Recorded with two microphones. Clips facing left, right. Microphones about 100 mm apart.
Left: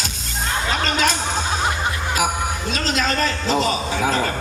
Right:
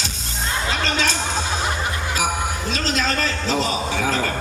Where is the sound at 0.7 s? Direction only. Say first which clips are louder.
Left 4 dB; 40° left (ahead or behind).